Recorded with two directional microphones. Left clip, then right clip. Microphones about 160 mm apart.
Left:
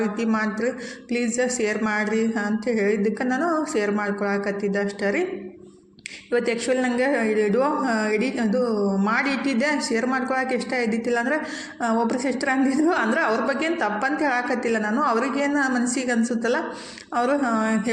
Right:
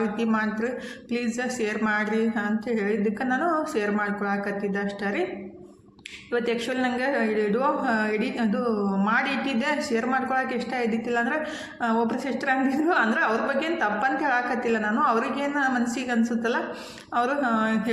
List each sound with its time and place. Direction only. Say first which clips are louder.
0.0 s speech: left 2 dB; 20° left (ahead or behind)
6.3 s speech: left 4 dB; 20° left (ahead or behind)